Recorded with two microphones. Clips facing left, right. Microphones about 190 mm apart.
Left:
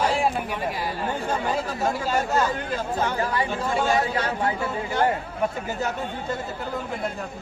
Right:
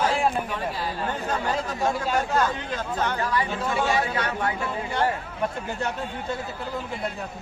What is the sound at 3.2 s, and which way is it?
Speech, 25° left (ahead or behind).